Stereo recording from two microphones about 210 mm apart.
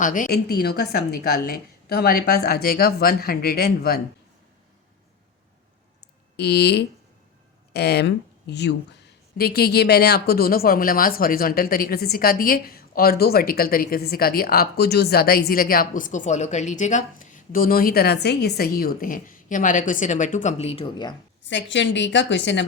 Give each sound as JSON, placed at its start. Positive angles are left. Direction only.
{"t": 0.0, "sound": "speech", "side_deg": 40}
{"t": 6.3, "sound": "speech", "side_deg": 50}
{"t": 21.5, "sound": "a woman's voice", "side_deg": 60}